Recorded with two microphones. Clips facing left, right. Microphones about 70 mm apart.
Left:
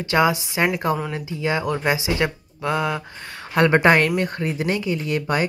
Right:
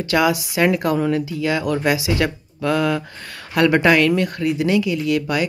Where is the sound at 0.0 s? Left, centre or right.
Left.